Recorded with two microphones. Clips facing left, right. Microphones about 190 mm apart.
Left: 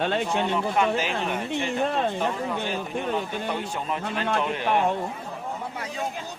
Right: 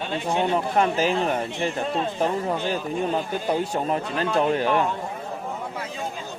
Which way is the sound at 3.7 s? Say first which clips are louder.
Right 4 dB; 40° right (ahead or behind).